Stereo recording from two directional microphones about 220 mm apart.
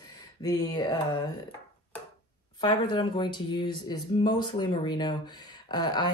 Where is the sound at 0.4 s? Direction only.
20° left (ahead or behind).